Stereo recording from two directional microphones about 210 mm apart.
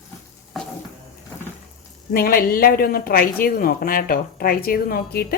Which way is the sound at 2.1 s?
45° left (ahead or behind).